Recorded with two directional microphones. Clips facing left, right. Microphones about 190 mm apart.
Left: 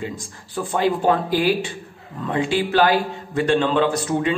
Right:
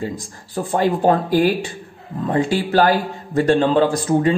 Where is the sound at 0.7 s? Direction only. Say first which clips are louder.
Right 2 dB; 40° right (ahead or behind).